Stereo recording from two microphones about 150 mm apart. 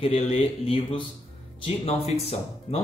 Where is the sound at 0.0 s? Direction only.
45° left (ahead or behind).